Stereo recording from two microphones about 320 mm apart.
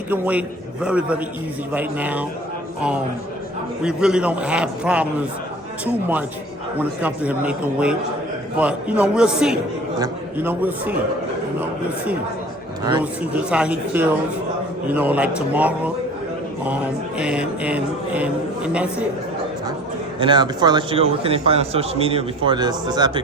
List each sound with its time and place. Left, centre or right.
0.1 s a man's voice: centre
3.8 s a man's voice: centre
6.7 s a man's voice: centre
12.8 s a man's voice: centre
17.2 s a man's voice: centre
20.1 s a man's voice: centre